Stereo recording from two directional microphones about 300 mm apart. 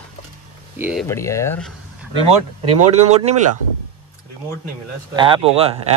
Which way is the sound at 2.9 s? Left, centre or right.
Right.